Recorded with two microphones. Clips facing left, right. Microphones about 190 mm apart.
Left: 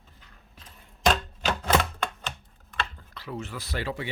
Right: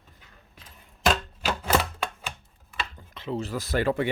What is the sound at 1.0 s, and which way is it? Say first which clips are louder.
Chopping: even; 5° right (ahead or behind).